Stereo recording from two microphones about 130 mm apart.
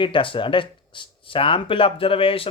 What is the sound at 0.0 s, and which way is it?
Speech, 40° left (ahead or behind).